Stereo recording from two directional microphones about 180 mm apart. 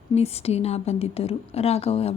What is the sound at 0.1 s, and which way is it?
A woman's voice, 35° left (ahead or behind).